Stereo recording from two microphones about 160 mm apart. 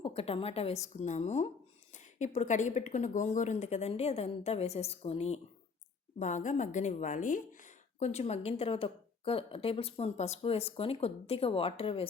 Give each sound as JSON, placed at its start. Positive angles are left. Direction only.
{"t": 0.0, "sound": "a woman's voice", "side_deg": 40}
{"t": 7.9, "sound": "a woman's voice", "side_deg": 45}